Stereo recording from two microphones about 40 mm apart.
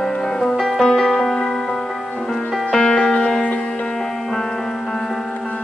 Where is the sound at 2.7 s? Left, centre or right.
Centre.